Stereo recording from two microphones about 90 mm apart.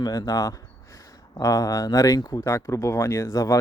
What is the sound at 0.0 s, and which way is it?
Speech, 45° left (ahead or behind).